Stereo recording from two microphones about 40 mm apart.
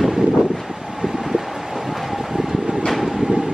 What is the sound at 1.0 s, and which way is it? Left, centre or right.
Wind, centre.